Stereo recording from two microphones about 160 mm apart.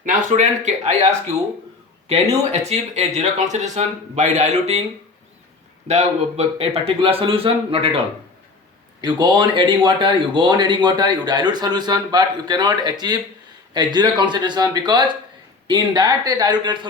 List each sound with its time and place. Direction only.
0.0 s speech: 50° right (ahead or behind)
2.0 s speech: 40° right (ahead or behind)
5.9 s a man's voice: 40° right (ahead or behind); by 16.7 s 25° right (ahead or behind)